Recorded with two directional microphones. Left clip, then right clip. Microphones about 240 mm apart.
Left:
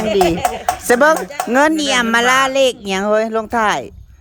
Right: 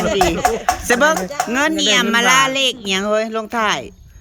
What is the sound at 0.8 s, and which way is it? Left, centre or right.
Speech, centre.